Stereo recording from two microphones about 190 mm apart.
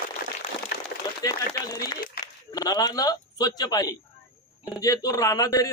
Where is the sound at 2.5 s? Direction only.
20° left (ahead or behind).